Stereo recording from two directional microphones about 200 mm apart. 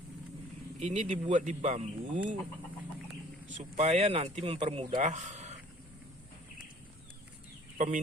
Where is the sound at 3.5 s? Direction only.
35° right (ahead or behind).